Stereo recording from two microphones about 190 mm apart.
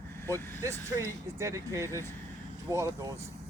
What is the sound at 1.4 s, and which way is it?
Speech, 15° right (ahead or behind).